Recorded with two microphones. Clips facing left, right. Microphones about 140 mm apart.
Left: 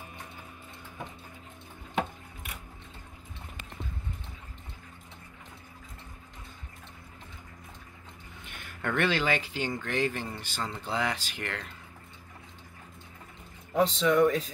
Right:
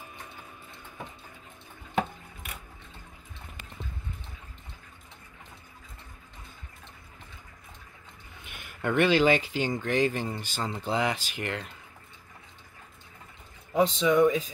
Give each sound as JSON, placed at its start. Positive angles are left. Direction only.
{"t": 8.5, "sound": "speech", "side_deg": -10}
{"t": 13.7, "sound": "speech", "side_deg": -5}